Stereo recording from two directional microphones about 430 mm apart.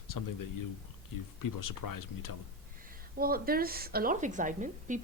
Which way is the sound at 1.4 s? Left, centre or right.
Left.